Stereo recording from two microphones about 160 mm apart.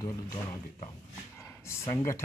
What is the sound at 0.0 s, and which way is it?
Speech, 25° left (ahead or behind).